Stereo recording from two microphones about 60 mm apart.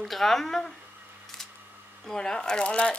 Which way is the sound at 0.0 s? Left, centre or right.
Centre.